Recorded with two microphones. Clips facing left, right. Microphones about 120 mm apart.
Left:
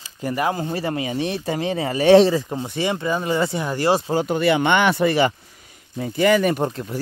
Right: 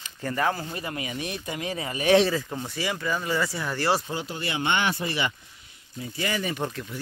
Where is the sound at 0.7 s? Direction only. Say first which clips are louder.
Left 9 dB; 35° left (ahead or behind).